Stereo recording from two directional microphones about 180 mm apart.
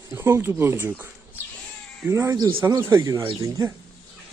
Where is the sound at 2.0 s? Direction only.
15° right (ahead or behind).